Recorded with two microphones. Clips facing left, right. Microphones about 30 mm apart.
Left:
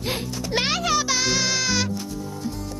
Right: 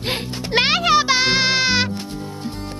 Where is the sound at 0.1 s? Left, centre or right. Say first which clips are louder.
Right 5 dB; right.